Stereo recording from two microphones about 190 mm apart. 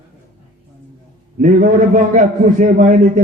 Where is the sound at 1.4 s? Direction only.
45° right (ahead or behind).